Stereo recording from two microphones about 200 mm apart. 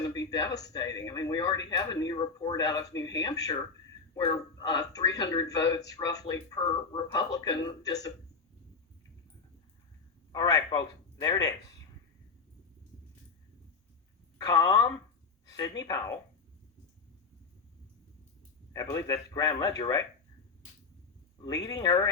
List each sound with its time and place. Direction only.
0.0 s a sound: 20° left (ahead or behind)
0.6 s speech: 20° left (ahead or behind)
10.3 s speech: 20° left (ahead or behind)
14.3 s a man's voice: 20° left (ahead or behind)
18.7 s a man's voice: 15° left (ahead or behind)
21.4 s speech: 20° left (ahead or behind)